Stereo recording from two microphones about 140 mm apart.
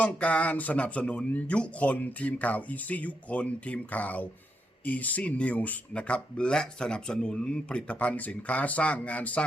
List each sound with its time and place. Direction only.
0.0 s speech: 10° left (ahead or behind)